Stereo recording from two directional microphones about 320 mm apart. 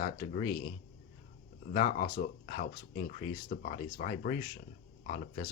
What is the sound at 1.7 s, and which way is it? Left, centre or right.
Speech, left.